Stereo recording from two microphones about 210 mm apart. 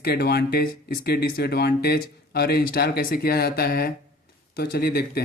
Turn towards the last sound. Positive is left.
turn(degrees=50)  # may be behind; listen again after turning